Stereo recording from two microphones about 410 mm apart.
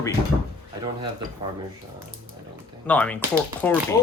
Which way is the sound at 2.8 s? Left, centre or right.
Centre.